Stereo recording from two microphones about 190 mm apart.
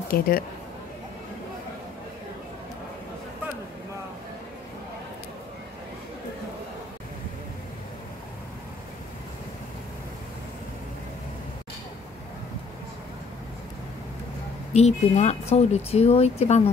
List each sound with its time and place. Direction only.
0.1 s speech: 50° left (ahead or behind)
14.7 s speech: 35° left (ahead or behind)